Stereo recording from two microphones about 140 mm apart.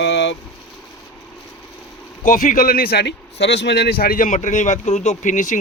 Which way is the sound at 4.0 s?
85° left.